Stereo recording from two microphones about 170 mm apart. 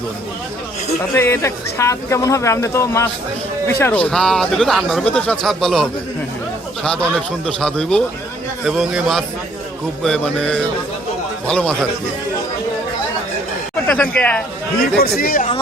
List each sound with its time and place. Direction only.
1.1 s speech: 15° left (ahead or behind)
13.8 s speech: 10° left (ahead or behind)
14.9 s speech: 65° left (ahead or behind)